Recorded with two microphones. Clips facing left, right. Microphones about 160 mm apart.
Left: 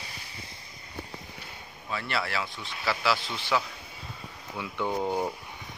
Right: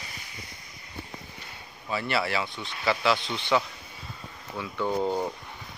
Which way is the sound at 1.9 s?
Centre (ahead or behind).